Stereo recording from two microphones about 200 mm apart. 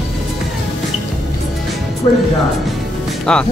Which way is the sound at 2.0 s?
25° left (ahead or behind).